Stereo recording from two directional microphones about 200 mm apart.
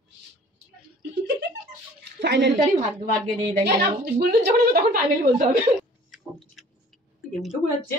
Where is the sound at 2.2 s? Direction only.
60° right (ahead or behind).